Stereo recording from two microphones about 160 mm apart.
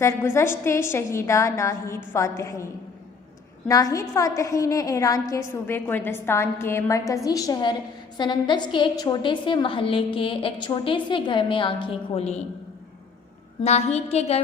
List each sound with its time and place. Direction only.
0.0 s a woman's voice: 15° left (ahead or behind)
3.7 s a woman's voice: 20° left (ahead or behind); by 12.5 s 45° left (ahead or behind)
13.6 s a woman's voice: 45° left (ahead or behind)